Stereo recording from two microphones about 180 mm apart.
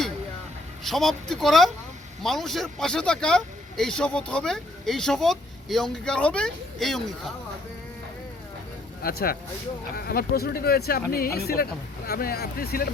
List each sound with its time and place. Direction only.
0.9 s speech: centre (ahead or behind)
9.0 s speech: 55° left (ahead or behind)